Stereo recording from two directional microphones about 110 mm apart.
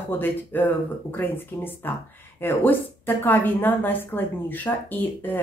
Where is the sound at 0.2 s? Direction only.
20° left (ahead or behind).